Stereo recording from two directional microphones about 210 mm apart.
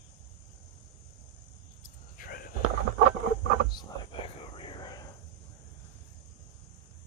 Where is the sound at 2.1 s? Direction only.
40° left (ahead or behind).